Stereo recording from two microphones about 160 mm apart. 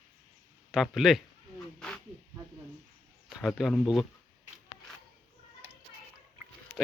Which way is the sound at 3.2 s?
Centre (ahead or behind).